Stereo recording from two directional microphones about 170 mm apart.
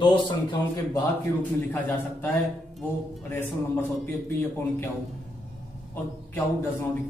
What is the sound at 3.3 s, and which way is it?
Speech, 10° left (ahead or behind).